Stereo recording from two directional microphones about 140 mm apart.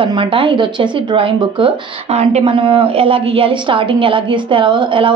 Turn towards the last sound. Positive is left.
turn(degrees=-35)  # may be behind; listen again after turning